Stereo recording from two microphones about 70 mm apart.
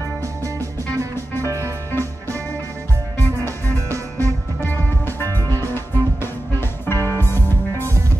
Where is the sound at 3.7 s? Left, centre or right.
Right.